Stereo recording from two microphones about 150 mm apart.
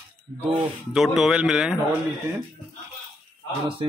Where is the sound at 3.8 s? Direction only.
35° right (ahead or behind).